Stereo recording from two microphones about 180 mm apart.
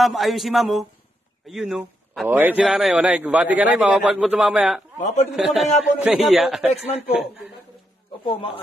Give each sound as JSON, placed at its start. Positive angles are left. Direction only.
{"t": 0.0, "sound": "a man's voice", "side_deg": 0}
{"t": 4.9, "sound": "a man's voice", "side_deg": 40}
{"t": 5.3, "sound": "a man's voice", "side_deg": 0}
{"t": 8.2, "sound": "a man's voice", "side_deg": 30}